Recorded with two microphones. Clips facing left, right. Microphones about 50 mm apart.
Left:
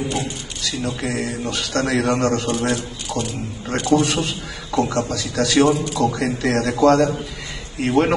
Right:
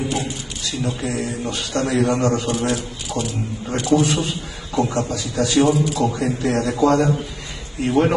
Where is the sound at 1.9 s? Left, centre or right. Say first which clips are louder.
Right 1 dB; left.